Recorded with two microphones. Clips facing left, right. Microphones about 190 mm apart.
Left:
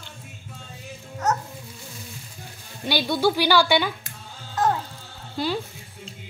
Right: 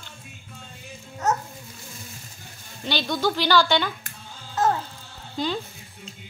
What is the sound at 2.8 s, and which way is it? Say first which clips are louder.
A woman's voice: left 3 dB; 10° left (ahead or behind).